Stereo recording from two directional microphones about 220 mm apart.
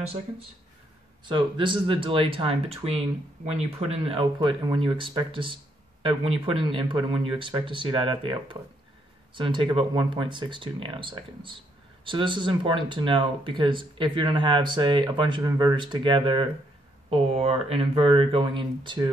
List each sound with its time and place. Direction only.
1.2 s speech: 20° right (ahead or behind)